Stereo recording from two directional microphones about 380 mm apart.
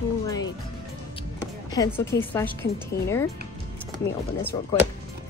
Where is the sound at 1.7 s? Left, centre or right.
Centre.